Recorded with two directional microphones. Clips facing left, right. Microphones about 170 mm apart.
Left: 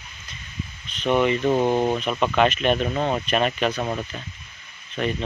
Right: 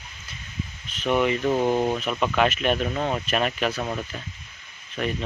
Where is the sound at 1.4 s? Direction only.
20° left (ahead or behind).